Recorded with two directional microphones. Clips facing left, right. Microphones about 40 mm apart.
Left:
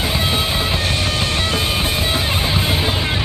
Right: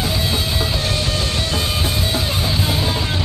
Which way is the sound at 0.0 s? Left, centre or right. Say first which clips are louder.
Left 2 dB; left.